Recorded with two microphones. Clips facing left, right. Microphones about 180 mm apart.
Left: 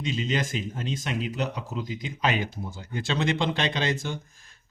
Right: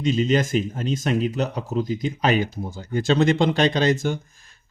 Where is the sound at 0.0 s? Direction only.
45° right (ahead or behind).